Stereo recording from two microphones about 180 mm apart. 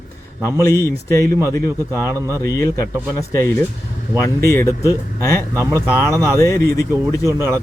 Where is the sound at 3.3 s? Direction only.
15° left (ahead or behind).